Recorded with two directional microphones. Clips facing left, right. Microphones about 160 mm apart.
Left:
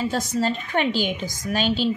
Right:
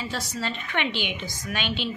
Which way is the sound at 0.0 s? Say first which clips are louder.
Left 8 dB; 45° left (ahead or behind).